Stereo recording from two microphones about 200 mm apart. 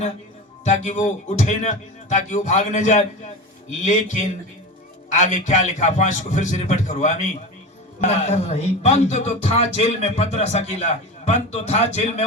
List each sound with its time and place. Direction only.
0.6 s speech: 35° left (ahead or behind)